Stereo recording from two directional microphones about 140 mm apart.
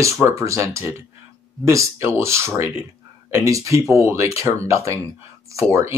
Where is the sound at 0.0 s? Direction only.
20° right (ahead or behind).